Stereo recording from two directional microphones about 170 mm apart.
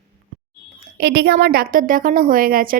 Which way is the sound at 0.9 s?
75° right (ahead or behind).